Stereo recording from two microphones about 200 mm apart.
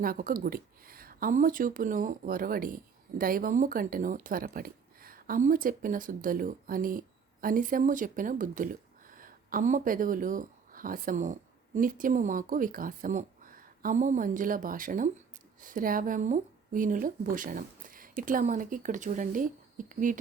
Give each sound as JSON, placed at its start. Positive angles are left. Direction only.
{"t": 0.0, "sound": "speech", "side_deg": -45}